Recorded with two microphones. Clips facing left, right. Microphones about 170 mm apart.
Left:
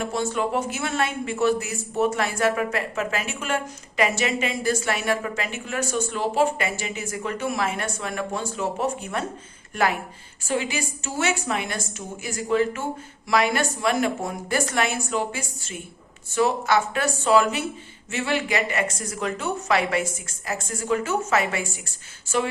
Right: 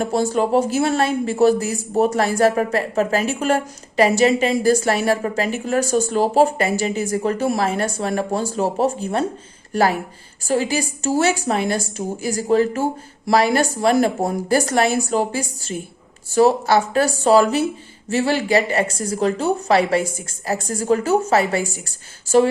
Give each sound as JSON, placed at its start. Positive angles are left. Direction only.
{"t": 0.0, "sound": "speech", "side_deg": -35}